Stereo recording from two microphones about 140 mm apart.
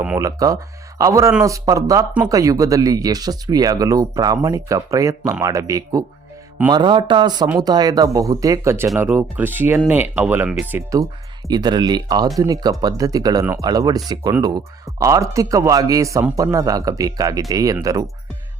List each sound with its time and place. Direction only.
0.2 s speech: 25° right (ahead or behind)
11.4 s speech: 30° right (ahead or behind)